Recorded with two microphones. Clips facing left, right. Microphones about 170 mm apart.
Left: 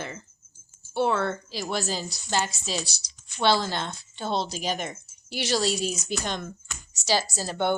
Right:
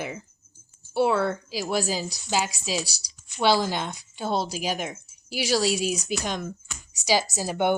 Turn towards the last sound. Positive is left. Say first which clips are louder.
# right 2 dB
turn(degrees=-10)  # may be behind; listen again after turning